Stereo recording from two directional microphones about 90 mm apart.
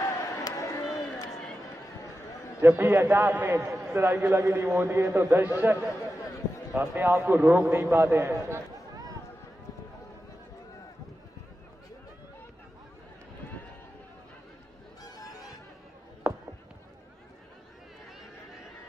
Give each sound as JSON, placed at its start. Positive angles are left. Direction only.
{"t": 0.0, "sound": "a sound", "side_deg": 40}
{"t": 2.6, "sound": "a man's voice", "side_deg": -25}
{"t": 16.3, "sound": "run", "side_deg": -15}